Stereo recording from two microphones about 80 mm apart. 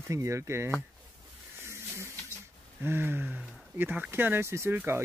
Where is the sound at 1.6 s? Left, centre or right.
Right.